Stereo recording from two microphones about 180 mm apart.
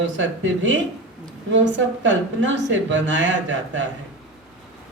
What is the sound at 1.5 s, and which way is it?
Speech, 90° right.